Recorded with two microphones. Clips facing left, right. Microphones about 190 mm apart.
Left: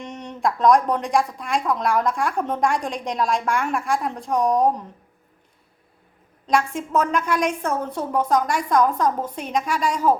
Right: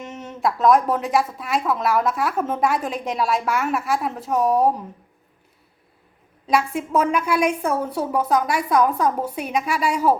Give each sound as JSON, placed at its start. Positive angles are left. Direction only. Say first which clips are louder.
{"t": 0.0, "sound": "speech", "louder": "even", "side_deg": -5}
{"t": 6.5, "sound": "a woman's voice", "louder": "right 1 dB", "side_deg": -5}